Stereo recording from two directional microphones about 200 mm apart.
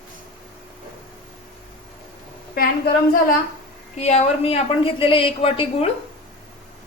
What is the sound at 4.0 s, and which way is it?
Speech, 35° left (ahead or behind).